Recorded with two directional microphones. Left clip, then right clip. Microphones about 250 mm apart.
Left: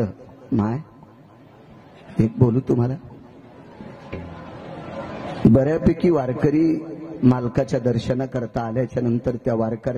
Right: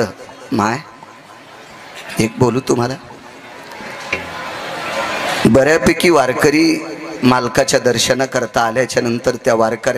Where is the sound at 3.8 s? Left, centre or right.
Centre.